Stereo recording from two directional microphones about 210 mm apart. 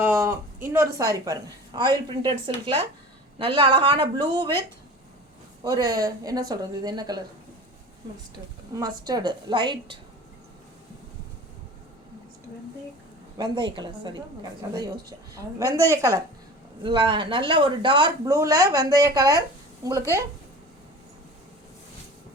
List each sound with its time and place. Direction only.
0.0 s speech: 10° right (ahead or behind)
5.6 s speech: 15° right (ahead or behind)
8.7 s speech: 20° right (ahead or behind)
13.4 s speech: 20° right (ahead or behind)
15.5 s speech: 15° right (ahead or behind)